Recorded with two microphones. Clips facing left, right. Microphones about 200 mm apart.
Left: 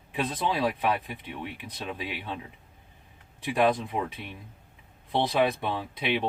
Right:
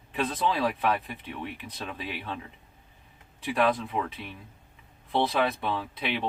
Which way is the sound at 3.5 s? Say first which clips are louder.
Left 1 dB; 20° left (ahead or behind).